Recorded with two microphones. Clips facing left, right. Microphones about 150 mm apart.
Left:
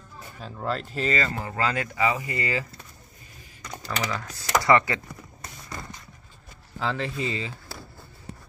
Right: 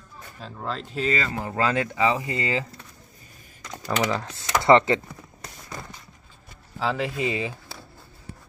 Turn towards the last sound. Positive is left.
turn(degrees=-15)  # may be behind; listen again after turning